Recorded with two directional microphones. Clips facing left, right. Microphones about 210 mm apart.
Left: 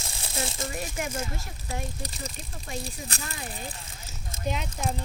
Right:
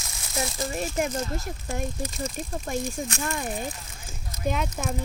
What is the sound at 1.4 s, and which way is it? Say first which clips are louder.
Speech: right 5 dB; 50° right (ahead or behind).